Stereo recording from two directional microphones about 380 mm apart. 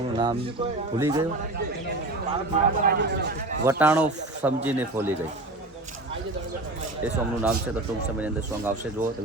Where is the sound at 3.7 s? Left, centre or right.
Centre.